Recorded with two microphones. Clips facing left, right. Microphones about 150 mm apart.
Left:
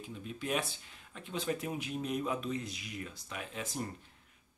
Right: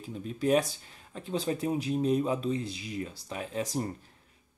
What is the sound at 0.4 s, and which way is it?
Speech, 40° right (ahead or behind).